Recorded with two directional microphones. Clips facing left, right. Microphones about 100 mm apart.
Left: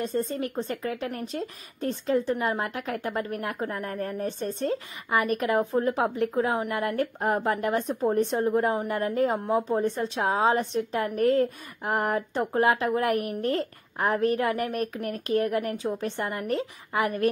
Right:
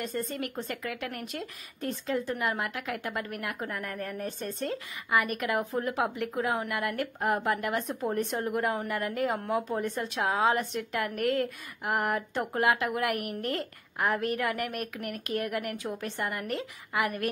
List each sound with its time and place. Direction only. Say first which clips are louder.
0.2 s a woman's voice: left 5 dB; 30° left (ahead or behind)